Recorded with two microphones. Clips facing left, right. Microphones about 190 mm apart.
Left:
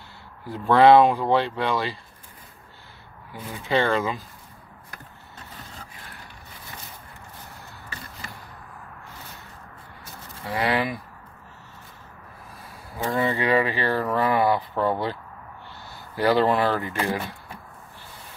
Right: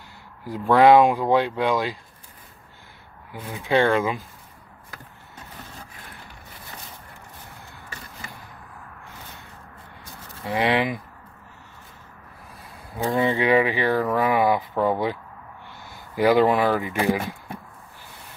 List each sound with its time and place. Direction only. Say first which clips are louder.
0.4 s speech: right 1 dB; 15° right (ahead or behind)
3.3 s speech: right 3 dB; 15° right (ahead or behind)
10.4 s speech: right 2 dB; 20° right (ahead or behind)
13.0 s speech: right 2 dB; 15° right (ahead or behind)
16.2 s speech: right 2 dB; 15° right (ahead or behind)